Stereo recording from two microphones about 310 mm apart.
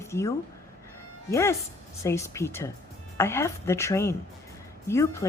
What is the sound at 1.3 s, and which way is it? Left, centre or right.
Speech, centre.